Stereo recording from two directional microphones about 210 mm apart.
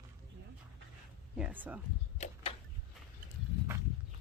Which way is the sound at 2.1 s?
30° left (ahead or behind).